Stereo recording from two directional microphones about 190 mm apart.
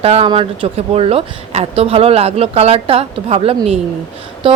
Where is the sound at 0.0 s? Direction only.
30° right (ahead or behind).